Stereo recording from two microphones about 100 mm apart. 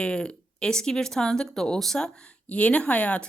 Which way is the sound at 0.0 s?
10° left (ahead or behind).